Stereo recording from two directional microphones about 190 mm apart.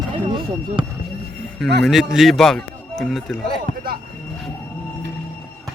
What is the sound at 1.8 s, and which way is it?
Speech, centre (ahead or behind).